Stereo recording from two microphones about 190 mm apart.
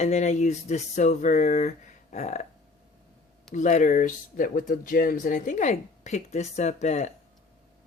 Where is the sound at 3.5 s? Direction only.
40° left (ahead or behind).